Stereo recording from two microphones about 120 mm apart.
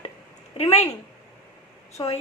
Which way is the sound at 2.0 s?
40° left (ahead or behind).